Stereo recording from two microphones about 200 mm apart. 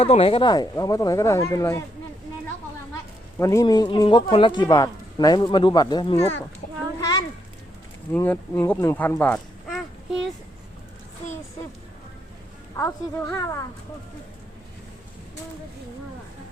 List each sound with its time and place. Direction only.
0.0 s speech: 30° left (ahead or behind)
3.3 s speech: 15° left (ahead or behind)
7.0 s a sound: 20° left (ahead or behind)
8.1 s speech: 10° left (ahead or behind)
12.7 s speech: 15° left (ahead or behind)